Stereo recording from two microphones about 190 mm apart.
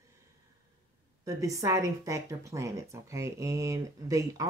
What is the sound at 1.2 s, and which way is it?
A woman's voice, 15° right (ahead or behind).